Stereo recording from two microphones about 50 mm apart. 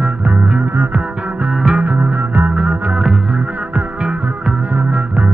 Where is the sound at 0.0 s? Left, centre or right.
Right.